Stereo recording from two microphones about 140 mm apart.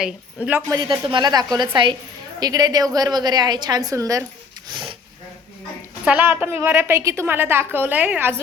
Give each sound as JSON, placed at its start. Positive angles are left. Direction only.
{"t": 0.0, "sound": "a woman's voice", "side_deg": -10}
{"t": 0.7, "sound": "a woman's voice", "side_deg": -30}
{"t": 4.7, "sound": "speech", "side_deg": -35}
{"t": 6.1, "sound": "a woman's voice", "side_deg": -10}